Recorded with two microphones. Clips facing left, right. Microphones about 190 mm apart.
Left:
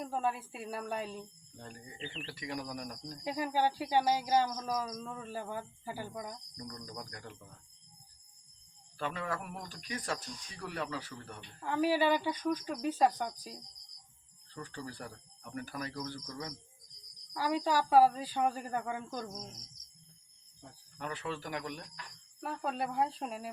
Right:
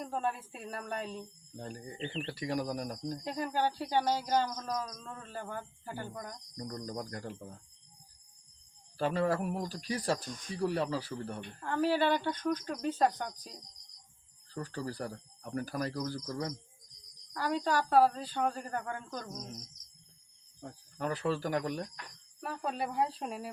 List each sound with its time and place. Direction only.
0.0 s speech: 5° left (ahead or behind)
1.5 s speech: 35° right (ahead or behind)
3.2 s cricket: 5° left (ahead or behind)
6.6 s speech: 40° right (ahead or behind)
9.0 s speech: 35° right (ahead or behind)
11.6 s cricket: 10° left (ahead or behind)
14.5 s speech: 40° right (ahead or behind)
17.3 s cricket: 10° left (ahead or behind)
20.6 s speech: 45° right (ahead or behind)
22.4 s speech: centre (ahead or behind)